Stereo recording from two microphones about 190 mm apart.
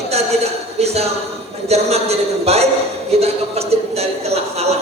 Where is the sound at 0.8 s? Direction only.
35° right (ahead or behind).